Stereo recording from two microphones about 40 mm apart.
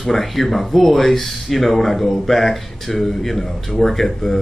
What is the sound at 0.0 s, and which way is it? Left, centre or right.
Speech, centre.